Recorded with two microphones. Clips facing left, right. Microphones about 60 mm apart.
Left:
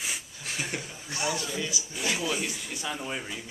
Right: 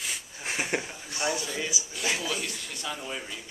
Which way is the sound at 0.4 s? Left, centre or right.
Right.